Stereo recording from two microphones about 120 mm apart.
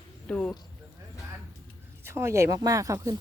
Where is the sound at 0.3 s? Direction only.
10° left (ahead or behind).